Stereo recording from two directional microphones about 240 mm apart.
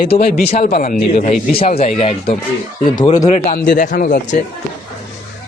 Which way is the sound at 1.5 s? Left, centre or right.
Left.